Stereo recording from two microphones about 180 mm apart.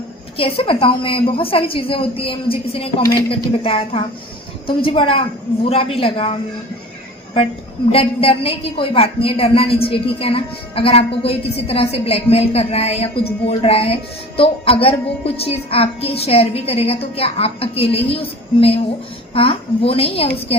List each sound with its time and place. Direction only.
0.3 s a woman's voice: 30° left (ahead or behind)
7.9 s a woman's voice: 30° left (ahead or behind)